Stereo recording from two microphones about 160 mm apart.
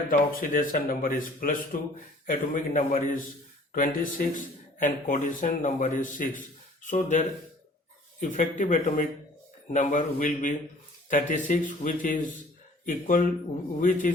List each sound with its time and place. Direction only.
0.1 s speech: 60° left (ahead or behind)